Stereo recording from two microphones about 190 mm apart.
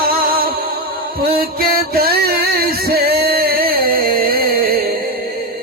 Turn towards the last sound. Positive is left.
turn(degrees=-50)  # may be behind; listen again after turning